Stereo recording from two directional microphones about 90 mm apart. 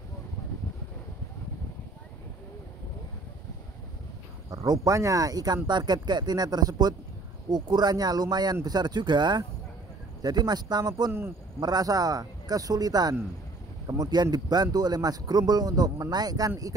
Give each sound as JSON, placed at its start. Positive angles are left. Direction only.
{"t": 4.5, "sound": "speech", "side_deg": -45}
{"t": 11.1, "sound": "a man's voice", "side_deg": -30}
{"t": 11.6, "sound": "speech", "side_deg": -45}